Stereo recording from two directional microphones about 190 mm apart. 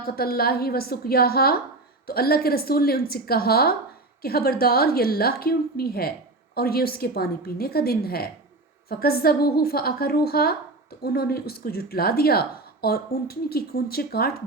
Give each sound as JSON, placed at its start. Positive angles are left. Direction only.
{"t": 0.0, "sound": "a woman's voice", "side_deg": 55}